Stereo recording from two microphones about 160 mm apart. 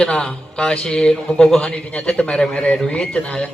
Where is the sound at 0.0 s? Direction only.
5° left (ahead or behind).